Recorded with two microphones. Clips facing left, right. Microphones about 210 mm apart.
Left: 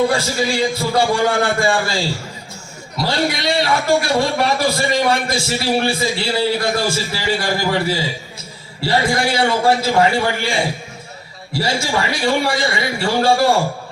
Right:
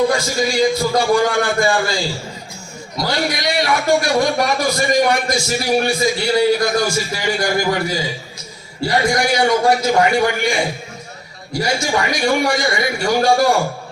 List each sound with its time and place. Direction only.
0.1 s a man's voice: 30° left (ahead or behind)